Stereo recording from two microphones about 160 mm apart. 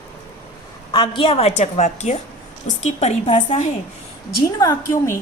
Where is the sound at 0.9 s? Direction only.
30° left (ahead or behind).